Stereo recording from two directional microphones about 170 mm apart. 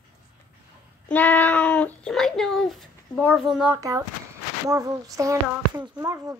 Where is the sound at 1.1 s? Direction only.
10° left (ahead or behind).